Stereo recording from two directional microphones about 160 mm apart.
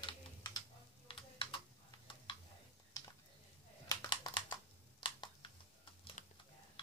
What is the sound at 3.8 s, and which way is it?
Typing, 30° left (ahead or behind).